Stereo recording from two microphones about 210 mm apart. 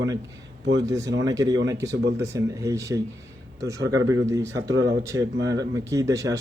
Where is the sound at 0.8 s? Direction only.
15° right (ahead or behind).